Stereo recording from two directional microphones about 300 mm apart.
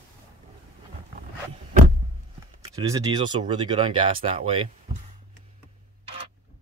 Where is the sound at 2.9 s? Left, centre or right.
Centre.